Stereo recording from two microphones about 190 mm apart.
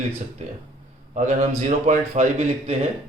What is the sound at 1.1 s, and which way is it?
A man's voice, 40° right (ahead or behind).